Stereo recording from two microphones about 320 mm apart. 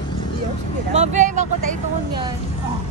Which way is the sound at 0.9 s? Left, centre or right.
Right.